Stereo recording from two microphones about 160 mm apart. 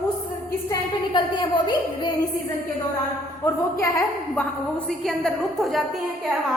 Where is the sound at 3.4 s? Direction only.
15° left (ahead or behind).